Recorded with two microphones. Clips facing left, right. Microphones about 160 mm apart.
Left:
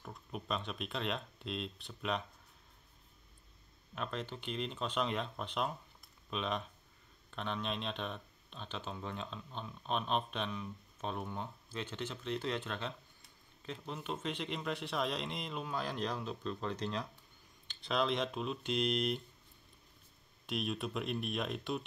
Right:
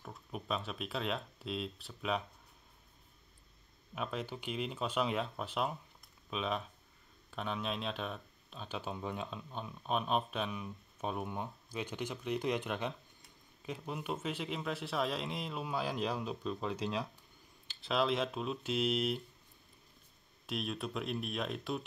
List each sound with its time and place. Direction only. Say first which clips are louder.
0.0 s speech: even; centre (ahead or behind)
3.9 s speech: right 2 dB; 10° right (ahead or behind)
20.4 s speech: left 1 dB; centre (ahead or behind)